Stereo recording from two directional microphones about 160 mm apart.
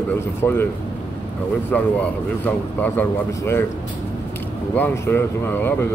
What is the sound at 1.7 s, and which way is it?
A man's voice, 10° left (ahead or behind).